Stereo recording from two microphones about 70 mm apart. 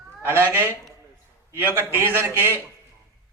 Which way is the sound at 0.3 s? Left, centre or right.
Right.